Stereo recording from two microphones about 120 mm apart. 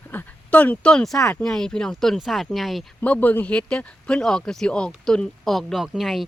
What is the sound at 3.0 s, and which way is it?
Speech, 15° left (ahead or behind).